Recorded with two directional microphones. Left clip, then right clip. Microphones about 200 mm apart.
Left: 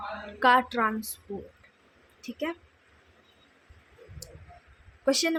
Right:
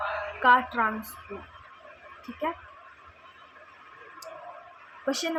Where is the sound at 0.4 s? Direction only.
40° left (ahead or behind).